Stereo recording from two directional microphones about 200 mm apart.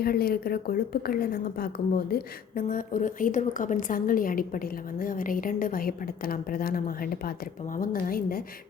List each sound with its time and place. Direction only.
0.0 s a woman's voice: 50° left (ahead or behind)